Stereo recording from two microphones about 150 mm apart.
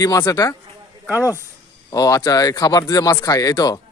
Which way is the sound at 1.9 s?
25° left (ahead or behind).